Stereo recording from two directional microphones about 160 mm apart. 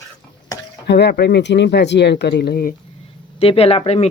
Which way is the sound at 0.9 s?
90° left.